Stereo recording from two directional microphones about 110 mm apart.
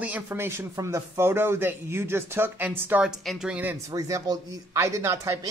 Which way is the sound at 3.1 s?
5° right (ahead or behind).